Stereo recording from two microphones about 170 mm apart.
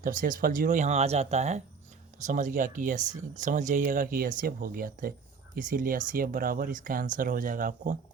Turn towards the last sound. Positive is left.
turn(degrees=-55)  # may be behind; listen again after turning